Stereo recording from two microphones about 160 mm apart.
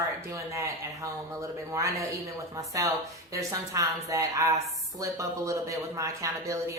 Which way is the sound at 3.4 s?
20° right (ahead or behind).